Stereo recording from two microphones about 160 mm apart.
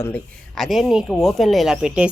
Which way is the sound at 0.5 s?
Centre (ahead or behind).